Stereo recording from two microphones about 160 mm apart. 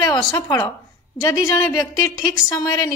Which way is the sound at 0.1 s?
30° left (ahead or behind).